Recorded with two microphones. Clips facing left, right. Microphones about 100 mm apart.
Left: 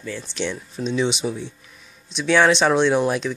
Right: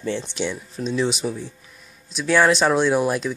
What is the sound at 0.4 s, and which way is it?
Speech, 5° right (ahead or behind).